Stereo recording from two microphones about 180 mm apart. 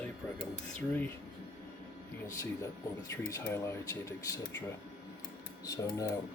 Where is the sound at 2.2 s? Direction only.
15° left (ahead or behind).